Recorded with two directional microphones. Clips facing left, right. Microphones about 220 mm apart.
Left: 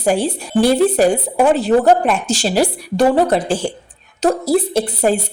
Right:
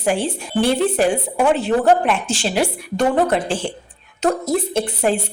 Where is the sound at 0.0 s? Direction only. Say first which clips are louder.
Left 3 dB; 40° left (ahead or behind).